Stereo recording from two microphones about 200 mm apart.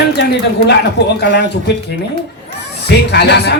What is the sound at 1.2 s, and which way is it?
Speech, 60° left (ahead or behind).